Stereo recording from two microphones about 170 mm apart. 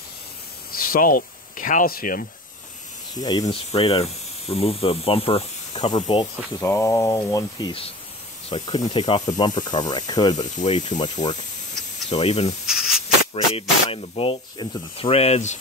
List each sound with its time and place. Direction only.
0.7 s speech: 60° left (ahead or behind)
3.2 s speech: 20° left (ahead or behind)
3.4 s speech: 35° left (ahead or behind)
12.1 s speech: 40° left (ahead or behind)
12.6 s snake: 5° right (ahead or behind)
13.3 s speech: 30° left (ahead or behind)